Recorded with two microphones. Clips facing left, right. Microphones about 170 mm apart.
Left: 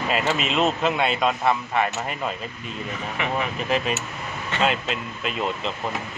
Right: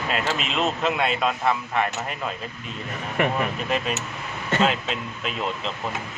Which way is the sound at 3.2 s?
50° right (ahead or behind).